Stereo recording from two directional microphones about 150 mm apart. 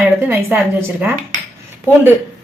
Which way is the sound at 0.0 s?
15° right (ahead or behind).